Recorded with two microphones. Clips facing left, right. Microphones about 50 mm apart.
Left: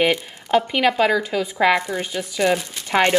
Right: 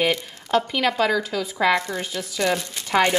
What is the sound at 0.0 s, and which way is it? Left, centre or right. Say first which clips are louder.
Speech: left 3 dB; left.